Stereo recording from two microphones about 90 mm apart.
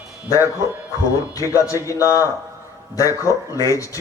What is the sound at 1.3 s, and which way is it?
A man's voice, 35° left (ahead or behind).